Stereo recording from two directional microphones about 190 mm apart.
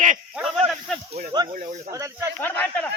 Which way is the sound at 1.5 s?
40° right (ahead or behind).